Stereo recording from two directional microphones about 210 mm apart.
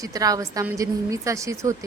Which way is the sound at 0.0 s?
15° right (ahead or behind).